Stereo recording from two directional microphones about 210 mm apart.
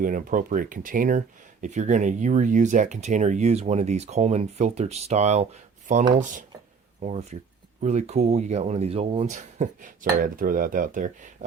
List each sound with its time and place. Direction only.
0.0 s speech: 40° right (ahead or behind)